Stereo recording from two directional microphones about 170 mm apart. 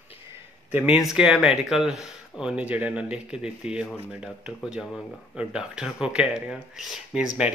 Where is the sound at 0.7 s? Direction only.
5° right (ahead or behind).